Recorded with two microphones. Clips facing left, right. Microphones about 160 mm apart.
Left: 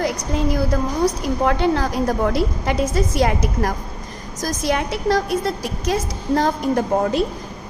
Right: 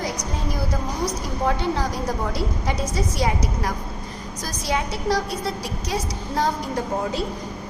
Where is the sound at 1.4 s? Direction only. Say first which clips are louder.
Left 4 dB; 70° left (ahead or behind); by 6.8 s 50° left (ahead or behind).